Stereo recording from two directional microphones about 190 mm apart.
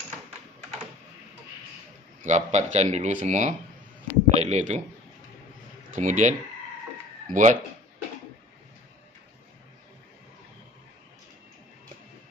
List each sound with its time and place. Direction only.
2.2 s speech: 40° right (ahead or behind)
5.9 s speech: 40° right (ahead or behind)